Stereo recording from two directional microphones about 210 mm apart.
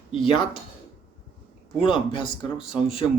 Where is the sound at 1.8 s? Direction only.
25° left (ahead or behind).